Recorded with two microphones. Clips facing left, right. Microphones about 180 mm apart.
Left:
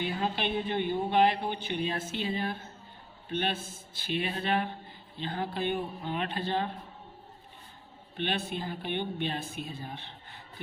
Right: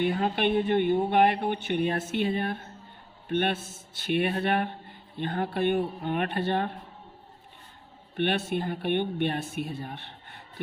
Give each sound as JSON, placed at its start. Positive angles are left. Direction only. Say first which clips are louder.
{"t": 0.0, "sound": "speech", "louder": "right 6 dB", "side_deg": -55}
{"t": 8.1, "sound": "speech", "louder": "right 6 dB", "side_deg": -60}